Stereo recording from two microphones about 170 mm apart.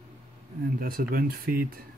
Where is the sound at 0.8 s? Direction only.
60° right (ahead or behind).